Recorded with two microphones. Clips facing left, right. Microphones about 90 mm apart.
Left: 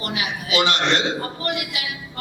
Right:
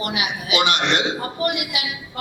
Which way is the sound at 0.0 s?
20° right (ahead or behind).